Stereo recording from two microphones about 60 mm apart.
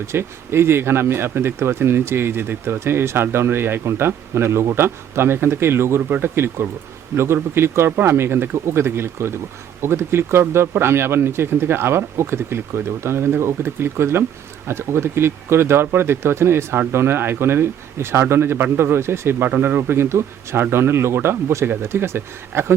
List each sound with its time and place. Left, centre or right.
0.1 s speech: right
6.0 s speech: right
7.1 s speech: right
19.5 s speech: right